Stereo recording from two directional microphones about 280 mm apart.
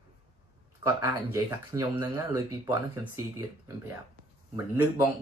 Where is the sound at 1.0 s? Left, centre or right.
Centre.